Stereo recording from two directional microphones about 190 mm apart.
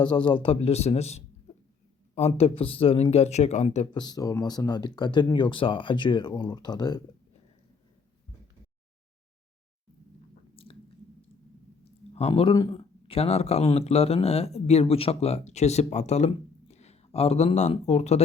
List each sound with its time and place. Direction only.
0.0 s speech: 25° left (ahead or behind)
3.9 s speech: 20° left (ahead or behind)
12.3 s speech: 25° left (ahead or behind)